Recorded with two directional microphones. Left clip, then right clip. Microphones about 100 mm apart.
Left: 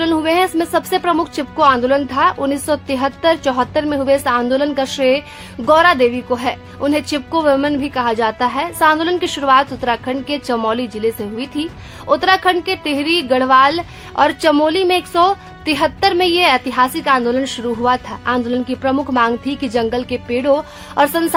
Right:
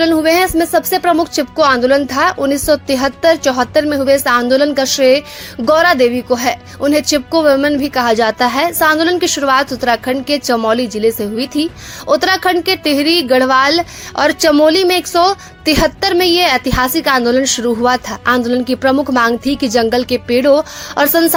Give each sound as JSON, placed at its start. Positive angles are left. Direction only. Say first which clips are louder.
{"t": 0.0, "sound": "a child's voice", "louder": "right 4 dB", "side_deg": -25}
{"t": 9.0, "sound": "a child's voice", "louder": "right 4 dB", "side_deg": -25}